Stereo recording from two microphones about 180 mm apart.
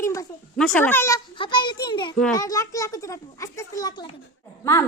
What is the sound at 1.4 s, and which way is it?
A woman's voice, 25° left (ahead or behind).